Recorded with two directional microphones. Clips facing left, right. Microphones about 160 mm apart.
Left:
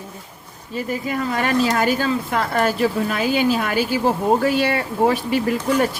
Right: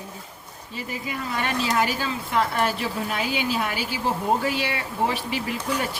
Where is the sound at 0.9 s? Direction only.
45° left (ahead or behind).